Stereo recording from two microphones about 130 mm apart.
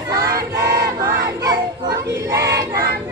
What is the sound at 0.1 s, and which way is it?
Child singing, 25° right (ahead or behind).